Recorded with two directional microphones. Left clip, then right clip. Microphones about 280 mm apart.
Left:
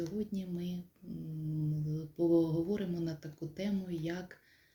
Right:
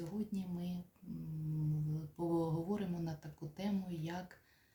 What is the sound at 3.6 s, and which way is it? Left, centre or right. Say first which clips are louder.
Speech: left 4 dB; centre.